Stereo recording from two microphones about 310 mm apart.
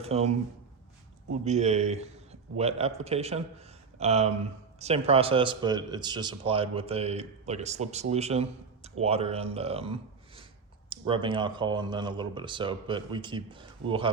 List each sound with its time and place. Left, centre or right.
0.0 s a man's voice: centre
1.3 s a man's voice: right